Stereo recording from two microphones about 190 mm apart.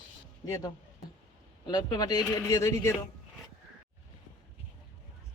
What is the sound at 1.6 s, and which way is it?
Speech, 20° left (ahead or behind).